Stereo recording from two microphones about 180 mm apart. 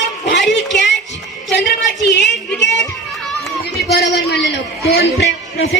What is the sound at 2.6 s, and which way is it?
Music, 80° left.